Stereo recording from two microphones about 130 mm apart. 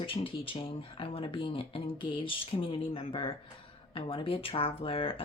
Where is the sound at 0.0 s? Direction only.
40° left (ahead or behind).